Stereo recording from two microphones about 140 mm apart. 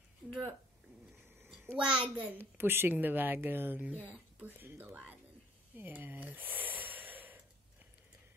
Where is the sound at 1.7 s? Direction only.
5° right (ahead or behind).